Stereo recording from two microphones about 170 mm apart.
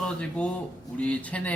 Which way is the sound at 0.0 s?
5° left (ahead or behind).